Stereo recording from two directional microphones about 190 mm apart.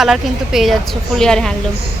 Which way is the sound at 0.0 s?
Centre (ahead or behind).